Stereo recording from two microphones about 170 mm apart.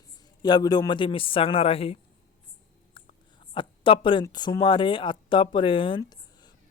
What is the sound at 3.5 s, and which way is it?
Speech, 30° left (ahead or behind).